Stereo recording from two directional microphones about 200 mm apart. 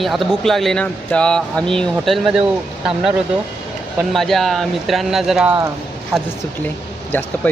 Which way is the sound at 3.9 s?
Centre (ahead or behind).